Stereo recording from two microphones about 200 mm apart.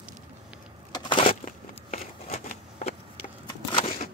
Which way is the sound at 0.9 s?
25° left (ahead or behind).